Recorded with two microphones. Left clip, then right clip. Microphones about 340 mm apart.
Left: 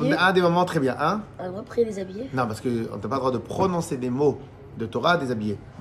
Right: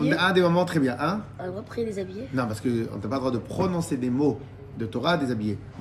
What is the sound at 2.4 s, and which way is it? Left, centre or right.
Speech, centre.